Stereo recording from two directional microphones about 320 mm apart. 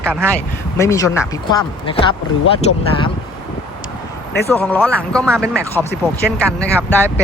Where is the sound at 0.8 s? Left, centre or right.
Centre.